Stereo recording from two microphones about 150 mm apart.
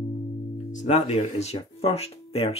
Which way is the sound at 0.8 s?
40° left (ahead or behind).